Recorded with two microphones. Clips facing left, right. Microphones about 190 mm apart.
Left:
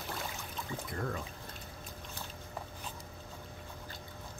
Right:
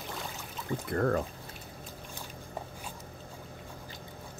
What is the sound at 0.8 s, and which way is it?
Speech, 60° right (ahead or behind).